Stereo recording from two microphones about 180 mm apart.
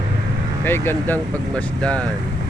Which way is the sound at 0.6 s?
10° left (ahead or behind).